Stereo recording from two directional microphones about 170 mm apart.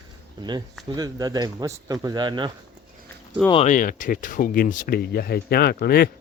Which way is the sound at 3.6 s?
50° left (ahead or behind).